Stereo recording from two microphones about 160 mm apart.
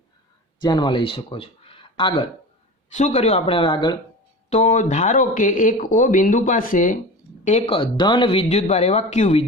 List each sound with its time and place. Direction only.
0.6 s speech: 30° left (ahead or behind)
2.9 s speech: 45° left (ahead or behind)
4.4 s speech: 45° left (ahead or behind)
7.4 s speech: 40° left (ahead or behind)